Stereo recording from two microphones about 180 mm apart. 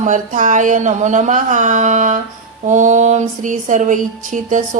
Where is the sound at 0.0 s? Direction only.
45° right (ahead or behind).